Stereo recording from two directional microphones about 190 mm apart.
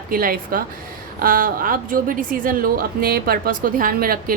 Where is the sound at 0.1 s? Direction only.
50° right (ahead or behind).